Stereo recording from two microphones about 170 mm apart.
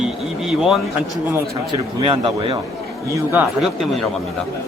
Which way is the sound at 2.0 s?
30° right (ahead or behind).